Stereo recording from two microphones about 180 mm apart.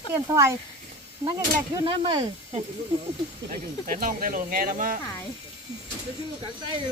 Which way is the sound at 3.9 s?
50° right (ahead or behind).